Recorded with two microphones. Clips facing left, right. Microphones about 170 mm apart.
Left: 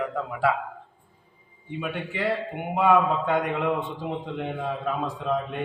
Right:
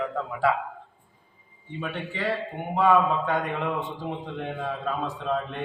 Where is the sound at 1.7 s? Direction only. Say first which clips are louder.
Left 2 dB; 10° left (ahead or behind).